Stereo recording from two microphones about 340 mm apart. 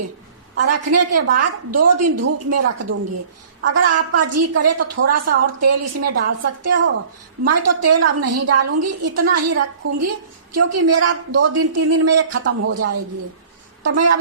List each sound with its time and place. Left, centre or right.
0.5 s a woman's voice: right
11.0 s a woman's voice: right
13.8 s a woman's voice: right